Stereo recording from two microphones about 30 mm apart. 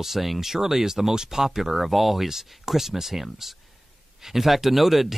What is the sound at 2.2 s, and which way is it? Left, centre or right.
Speech, centre.